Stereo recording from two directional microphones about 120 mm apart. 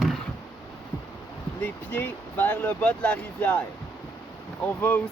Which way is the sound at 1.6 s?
15° left (ahead or behind).